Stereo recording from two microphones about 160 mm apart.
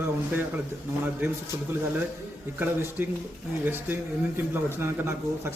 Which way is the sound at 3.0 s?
10° right (ahead or behind).